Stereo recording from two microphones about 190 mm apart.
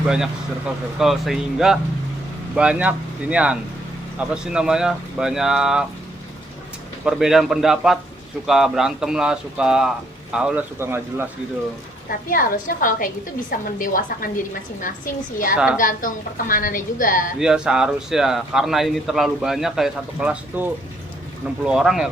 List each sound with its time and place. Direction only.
0.9 s speech: centre (ahead or behind)
7.0 s speech: 5° right (ahead or behind)
12.3 s speech: 45° left (ahead or behind)
15.5 s speech: 5° right (ahead or behind)
15.8 s speech: 45° left (ahead or behind)
17.4 s speech: 5° right (ahead or behind)